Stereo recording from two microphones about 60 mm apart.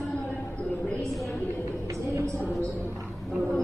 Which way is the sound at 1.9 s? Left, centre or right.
Right.